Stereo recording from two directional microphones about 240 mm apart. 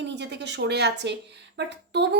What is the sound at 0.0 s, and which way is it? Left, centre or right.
Speech, right.